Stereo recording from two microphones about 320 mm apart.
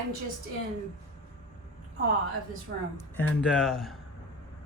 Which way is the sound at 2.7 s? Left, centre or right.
Right.